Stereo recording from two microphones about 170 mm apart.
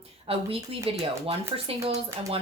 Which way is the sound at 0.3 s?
35° right (ahead or behind).